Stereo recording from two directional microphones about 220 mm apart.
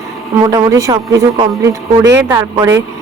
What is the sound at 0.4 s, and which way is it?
A man's voice, 15° right (ahead or behind).